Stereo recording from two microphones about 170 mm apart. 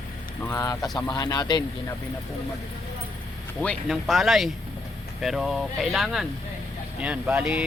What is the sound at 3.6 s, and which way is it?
Speech, 5° left (ahead or behind).